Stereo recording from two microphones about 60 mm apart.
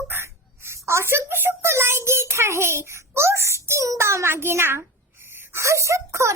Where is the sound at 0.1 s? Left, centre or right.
Right.